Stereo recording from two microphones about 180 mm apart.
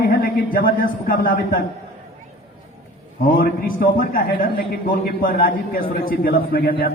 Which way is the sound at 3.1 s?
55° left (ahead or behind).